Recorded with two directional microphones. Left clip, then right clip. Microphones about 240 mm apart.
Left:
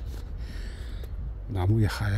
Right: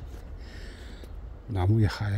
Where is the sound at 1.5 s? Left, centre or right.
Centre.